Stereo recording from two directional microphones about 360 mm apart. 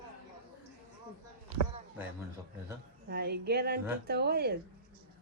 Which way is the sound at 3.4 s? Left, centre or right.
Right.